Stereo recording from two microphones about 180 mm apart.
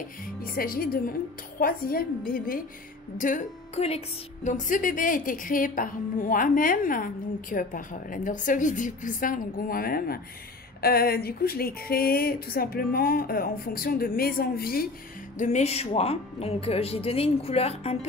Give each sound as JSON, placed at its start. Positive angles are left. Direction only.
{"t": 0.4, "sound": "a woman's voice", "side_deg": 55}
{"t": 15.3, "sound": "speech", "side_deg": 40}